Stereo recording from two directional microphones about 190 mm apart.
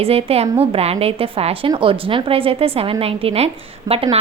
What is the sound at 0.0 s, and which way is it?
A woman's voice, 30° right (ahead or behind).